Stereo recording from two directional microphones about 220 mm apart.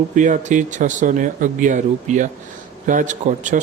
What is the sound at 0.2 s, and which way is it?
Speech, 35° right (ahead or behind).